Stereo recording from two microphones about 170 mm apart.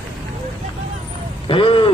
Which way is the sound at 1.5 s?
30° left (ahead or behind).